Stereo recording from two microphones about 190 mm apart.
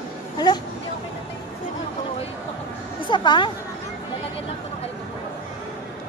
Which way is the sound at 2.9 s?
25° left (ahead or behind).